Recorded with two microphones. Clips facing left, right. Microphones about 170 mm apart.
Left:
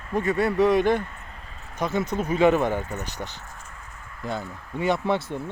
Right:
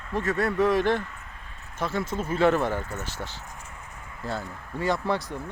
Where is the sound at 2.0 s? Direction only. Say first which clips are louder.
Left 3 dB; 15° left (ahead or behind).